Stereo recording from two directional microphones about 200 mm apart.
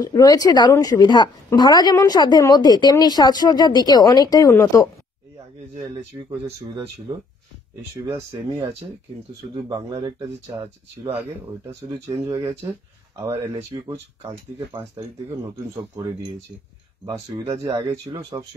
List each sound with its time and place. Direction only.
0.0 s a woman's voice: 20° left (ahead or behind)
7.1 s speech: 15° right (ahead or behind)
9.6 s speech: 20° right (ahead or behind)
17.5 s speech: 15° right (ahead or behind)